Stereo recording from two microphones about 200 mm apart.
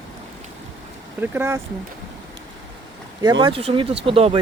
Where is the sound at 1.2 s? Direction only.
10° right (ahead or behind).